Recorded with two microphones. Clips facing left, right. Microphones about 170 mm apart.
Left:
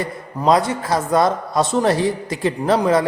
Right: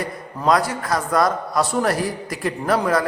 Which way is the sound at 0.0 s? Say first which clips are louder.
Left 2 dB; 25° left (ahead or behind).